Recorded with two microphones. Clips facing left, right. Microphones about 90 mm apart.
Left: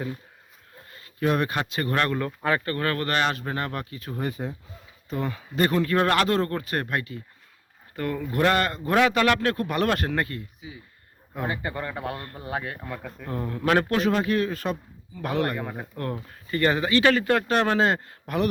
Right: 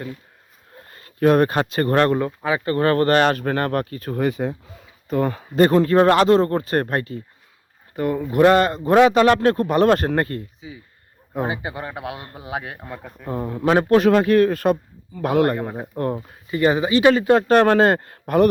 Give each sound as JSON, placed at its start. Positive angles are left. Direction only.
{"t": 0.9, "sound": "speech", "side_deg": -45}
{"t": 4.2, "sound": "speech", "side_deg": -85}
{"t": 5.0, "sound": "speech", "side_deg": -50}
{"t": 7.9, "sound": "a man's voice", "side_deg": -20}
{"t": 11.3, "sound": "speech", "side_deg": -15}
{"t": 14.1, "sound": "speech", "side_deg": -60}
{"t": 15.5, "sound": "a man's voice", "side_deg": -25}
{"t": 17.5, "sound": "speech", "side_deg": -50}